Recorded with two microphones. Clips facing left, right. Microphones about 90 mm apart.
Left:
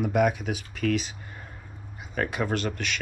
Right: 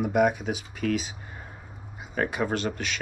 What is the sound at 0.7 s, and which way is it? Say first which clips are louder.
Speech: left 2 dB; 10° right (ahead or behind).